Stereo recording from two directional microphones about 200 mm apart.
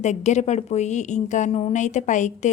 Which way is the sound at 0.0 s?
35° left (ahead or behind).